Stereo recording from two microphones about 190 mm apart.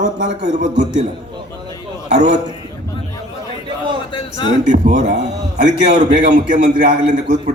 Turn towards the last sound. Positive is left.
turn(degrees=-40)  # may be behind; listen again after turning